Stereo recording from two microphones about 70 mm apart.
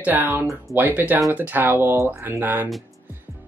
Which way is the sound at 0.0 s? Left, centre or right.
Right.